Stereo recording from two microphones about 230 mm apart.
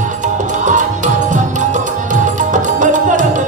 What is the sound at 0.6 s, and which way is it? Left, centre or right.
Music, right.